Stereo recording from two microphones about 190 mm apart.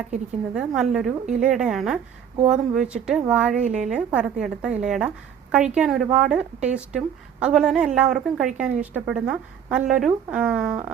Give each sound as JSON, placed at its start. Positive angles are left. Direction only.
{"t": 0.1, "sound": "a woman's voice", "side_deg": -5}